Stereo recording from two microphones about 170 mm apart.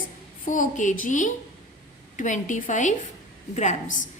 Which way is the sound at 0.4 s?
50° left (ahead or behind).